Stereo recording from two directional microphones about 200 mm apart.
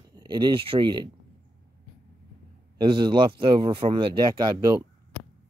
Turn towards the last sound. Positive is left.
turn(degrees=-20)  # may be behind; listen again after turning